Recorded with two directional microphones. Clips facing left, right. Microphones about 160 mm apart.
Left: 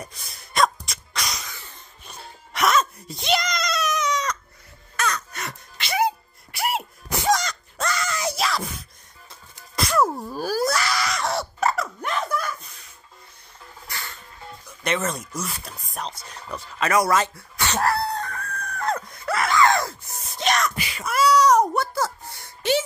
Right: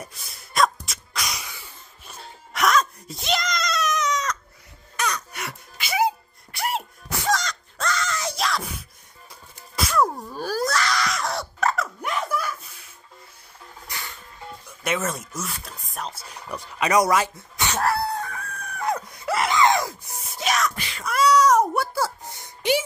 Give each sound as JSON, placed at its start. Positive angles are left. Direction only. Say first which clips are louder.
{"t": 0.0, "sound": "sneeze", "louder": "left 1 dB", "side_deg": -5}
{"t": 4.9, "sound": "crow", "louder": "left 1 dB", "side_deg": -15}
{"t": 6.5, "sound": "a sound", "louder": "left 1 dB", "side_deg": 5}
{"t": 7.1, "sound": "wail", "louder": "left 3 dB", "side_deg": 15}
{"t": 13.8, "sound": "music", "louder": "even", "side_deg": -15}
{"t": 14.8, "sound": "speech", "louder": "left 1 dB", "side_deg": -5}
{"t": 17.7, "sound": "fowl", "louder": "left 1 dB", "side_deg": -5}
{"t": 20.4, "sound": "wail", "louder": "left 1 dB", "side_deg": 0}
{"t": 22.2, "sound": "a sound", "louder": "right 1 dB", "side_deg": -20}